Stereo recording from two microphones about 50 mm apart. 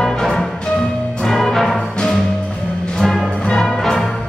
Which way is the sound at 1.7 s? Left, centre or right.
Centre.